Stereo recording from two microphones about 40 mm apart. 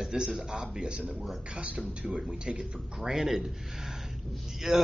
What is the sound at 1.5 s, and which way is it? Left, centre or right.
Speech, right.